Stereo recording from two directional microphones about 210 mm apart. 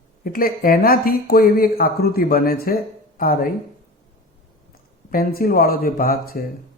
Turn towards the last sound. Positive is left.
turn(degrees=45)  # may be behind; listen again after turning